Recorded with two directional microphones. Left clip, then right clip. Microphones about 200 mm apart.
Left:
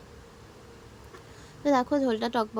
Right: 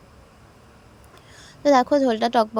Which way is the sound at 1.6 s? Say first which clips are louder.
Right 8 dB; 30° right (ahead or behind).